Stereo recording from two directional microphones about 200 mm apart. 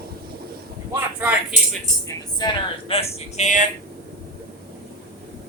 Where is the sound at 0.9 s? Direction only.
10° right (ahead or behind).